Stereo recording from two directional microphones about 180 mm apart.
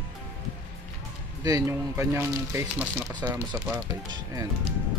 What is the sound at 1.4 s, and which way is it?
Speech, 15° right (ahead or behind).